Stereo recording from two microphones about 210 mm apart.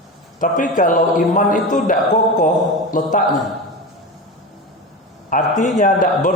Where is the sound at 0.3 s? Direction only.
40° left (ahead or behind).